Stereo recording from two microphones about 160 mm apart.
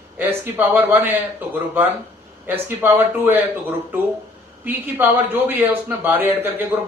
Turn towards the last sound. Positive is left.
turn(degrees=-15)  # may be behind; listen again after turning